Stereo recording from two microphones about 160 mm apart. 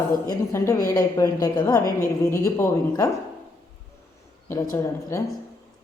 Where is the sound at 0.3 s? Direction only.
20° left (ahead or behind).